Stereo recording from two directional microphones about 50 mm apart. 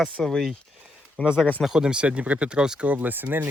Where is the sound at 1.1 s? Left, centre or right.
Centre.